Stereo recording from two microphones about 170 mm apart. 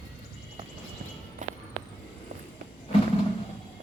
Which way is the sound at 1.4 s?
50° right (ahead or behind).